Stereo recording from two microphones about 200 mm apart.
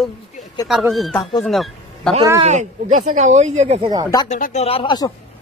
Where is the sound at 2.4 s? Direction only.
35° right (ahead or behind).